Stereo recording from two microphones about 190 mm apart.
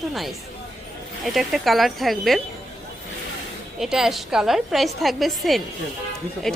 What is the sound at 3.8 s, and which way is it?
Speech, centre (ahead or behind).